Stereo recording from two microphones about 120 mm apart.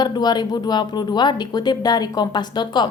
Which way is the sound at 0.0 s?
35° left (ahead or behind).